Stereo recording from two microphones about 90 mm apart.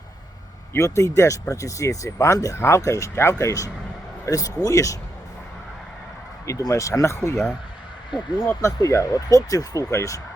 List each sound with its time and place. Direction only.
0.7 s speech: 35° left (ahead or behind)
6.4 s speech: 35° left (ahead or behind)
8.6 s speech: 35° left (ahead or behind)